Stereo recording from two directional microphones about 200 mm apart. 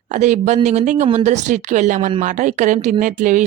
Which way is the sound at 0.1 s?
35° right (ahead or behind).